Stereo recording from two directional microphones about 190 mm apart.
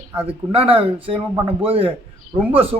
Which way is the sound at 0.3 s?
30° right (ahead or behind).